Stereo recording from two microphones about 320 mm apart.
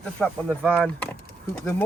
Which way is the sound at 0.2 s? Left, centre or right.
Centre.